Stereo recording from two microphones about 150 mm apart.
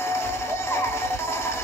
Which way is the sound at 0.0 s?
15° left (ahead or behind).